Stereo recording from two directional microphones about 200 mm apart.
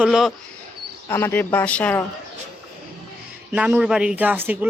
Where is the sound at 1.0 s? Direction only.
10° left (ahead or behind).